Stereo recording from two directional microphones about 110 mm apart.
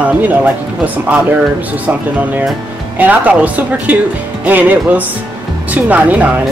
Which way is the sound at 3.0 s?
15° right (ahead or behind).